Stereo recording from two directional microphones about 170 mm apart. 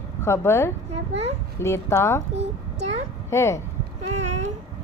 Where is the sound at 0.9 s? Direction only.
40° right (ahead or behind).